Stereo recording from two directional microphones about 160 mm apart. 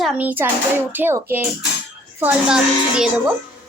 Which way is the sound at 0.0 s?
10° right (ahead or behind).